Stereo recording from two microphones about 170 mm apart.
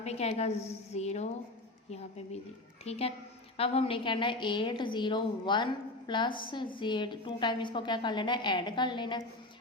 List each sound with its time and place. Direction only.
0.0 s a woman's voice: 40° left (ahead or behind)